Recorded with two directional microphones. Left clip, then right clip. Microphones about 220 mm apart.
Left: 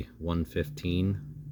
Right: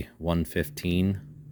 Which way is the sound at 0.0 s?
45° right (ahead or behind).